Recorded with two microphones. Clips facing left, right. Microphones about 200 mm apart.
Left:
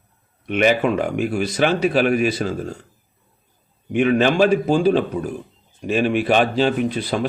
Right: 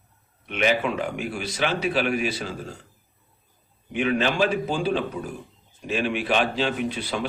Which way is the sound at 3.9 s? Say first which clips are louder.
Left 7 dB; 50° left (ahead or behind).